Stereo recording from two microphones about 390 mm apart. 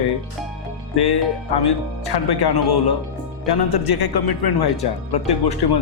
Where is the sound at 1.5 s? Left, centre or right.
Left.